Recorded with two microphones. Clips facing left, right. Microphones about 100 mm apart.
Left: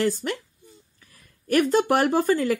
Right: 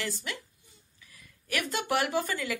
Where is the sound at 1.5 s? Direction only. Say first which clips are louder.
Left 11 dB; 45° left (ahead or behind).